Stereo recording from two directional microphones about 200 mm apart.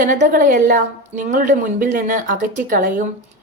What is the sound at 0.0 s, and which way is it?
A woman's voice, 40° right (ahead or behind).